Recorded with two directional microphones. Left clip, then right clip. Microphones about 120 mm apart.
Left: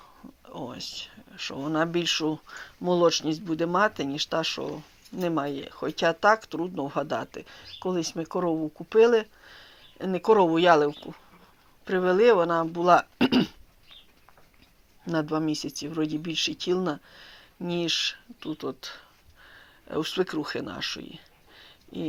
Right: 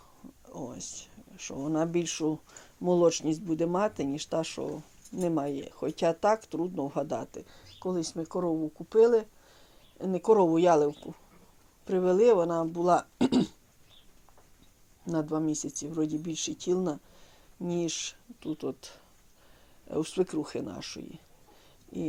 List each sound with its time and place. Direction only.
0.5 s a sound: 10° right (ahead or behind)
1.7 s speech: 10° right (ahead or behind); by 8.4 s 10° left (ahead or behind)
8.5 s speech: 25° left (ahead or behind)
8.9 s speech: 5° left (ahead or behind)
15.0 s speech: centre (ahead or behind)
18.5 s speech: 25° right (ahead or behind)